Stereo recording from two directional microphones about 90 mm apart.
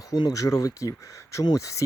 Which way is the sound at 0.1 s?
45° left (ahead or behind).